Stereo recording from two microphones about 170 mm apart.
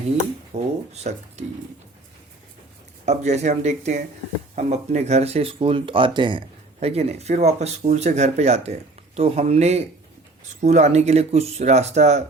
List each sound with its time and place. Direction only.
0.5 s speech: 40° right (ahead or behind)
3.1 s speech: 40° right (ahead or behind)